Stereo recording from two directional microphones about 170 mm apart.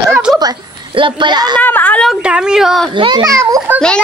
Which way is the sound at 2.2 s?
5° right (ahead or behind).